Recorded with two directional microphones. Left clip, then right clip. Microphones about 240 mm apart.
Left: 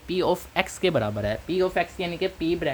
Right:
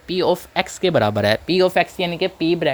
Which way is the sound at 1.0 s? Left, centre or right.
Right.